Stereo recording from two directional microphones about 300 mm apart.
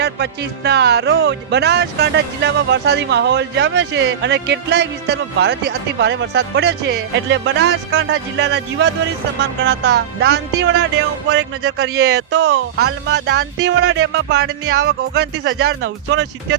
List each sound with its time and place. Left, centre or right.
0.0 s speech: right